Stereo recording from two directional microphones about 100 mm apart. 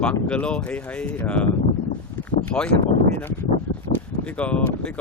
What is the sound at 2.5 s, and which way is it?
Speech, 55° left (ahead or behind).